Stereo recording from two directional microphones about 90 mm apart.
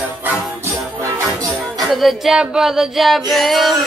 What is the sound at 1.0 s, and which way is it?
Music, 40° right (ahead or behind).